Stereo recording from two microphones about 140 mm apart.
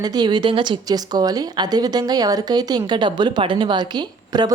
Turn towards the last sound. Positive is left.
turn(degrees=-30)  # may be behind; listen again after turning